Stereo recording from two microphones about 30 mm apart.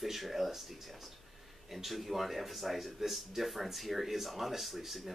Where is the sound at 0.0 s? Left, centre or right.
Centre.